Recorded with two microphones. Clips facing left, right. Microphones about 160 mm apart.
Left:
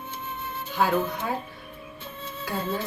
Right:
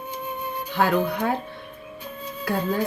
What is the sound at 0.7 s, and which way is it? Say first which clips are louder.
Speech: right 3 dB; 70° right (ahead or behind).